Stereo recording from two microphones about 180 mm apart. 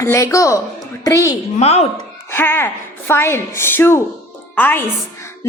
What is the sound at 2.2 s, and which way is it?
A woman's voice, 10° left (ahead or behind).